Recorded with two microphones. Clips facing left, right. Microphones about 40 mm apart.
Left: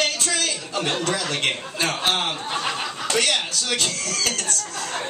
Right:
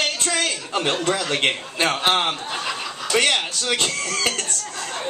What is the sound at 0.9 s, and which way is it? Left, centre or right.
Speech, centre.